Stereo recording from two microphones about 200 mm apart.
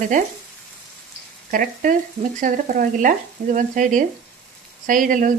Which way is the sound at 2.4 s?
40° right (ahead or behind).